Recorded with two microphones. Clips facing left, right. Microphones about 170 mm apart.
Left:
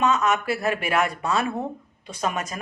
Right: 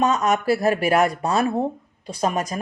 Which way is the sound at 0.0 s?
40° right (ahead or behind).